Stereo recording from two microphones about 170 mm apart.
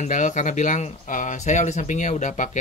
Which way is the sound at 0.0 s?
45° left (ahead or behind).